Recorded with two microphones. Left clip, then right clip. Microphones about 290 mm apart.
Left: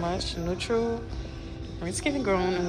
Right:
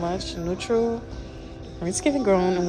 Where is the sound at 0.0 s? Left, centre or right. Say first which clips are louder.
Right 2 dB; centre.